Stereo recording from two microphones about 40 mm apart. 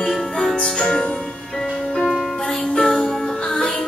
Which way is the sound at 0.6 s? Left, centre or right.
Left.